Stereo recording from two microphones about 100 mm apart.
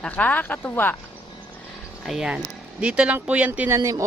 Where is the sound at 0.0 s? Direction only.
15° left (ahead or behind).